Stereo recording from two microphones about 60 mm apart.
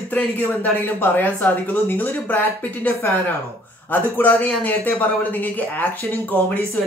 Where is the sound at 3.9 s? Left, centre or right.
Left.